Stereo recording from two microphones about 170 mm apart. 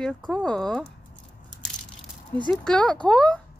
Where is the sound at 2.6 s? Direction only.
5° left (ahead or behind).